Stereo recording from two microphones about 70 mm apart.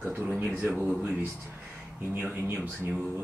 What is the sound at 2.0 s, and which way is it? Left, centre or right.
Speech, right.